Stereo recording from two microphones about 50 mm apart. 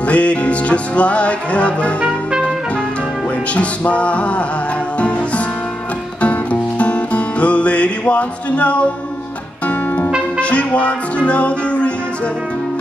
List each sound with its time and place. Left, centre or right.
0.1 s music: left
3.5 s music: left
6.2 s music: left
10.4 s music: left